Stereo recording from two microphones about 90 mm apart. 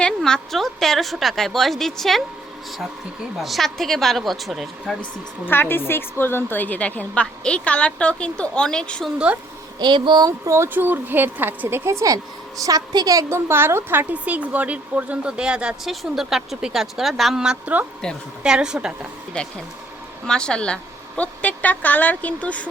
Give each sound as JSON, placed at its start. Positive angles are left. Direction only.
{"t": 0.0, "sound": "a woman's voice", "side_deg": 10}
{"t": 3.3, "sound": "a woman's voice", "side_deg": 0}
{"t": 5.5, "sound": "a woman's voice", "side_deg": 25}
{"t": 9.1, "sound": "a woman's voice", "side_deg": -15}
{"t": 9.7, "sound": "speech", "side_deg": -60}
{"t": 10.2, "sound": "speech", "side_deg": -35}
{"t": 13.5, "sound": "a woman's voice", "side_deg": -25}
{"t": 19.3, "sound": "a woman's voice", "side_deg": 10}